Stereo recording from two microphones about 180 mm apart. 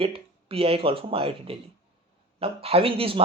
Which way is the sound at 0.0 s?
30° right (ahead or behind).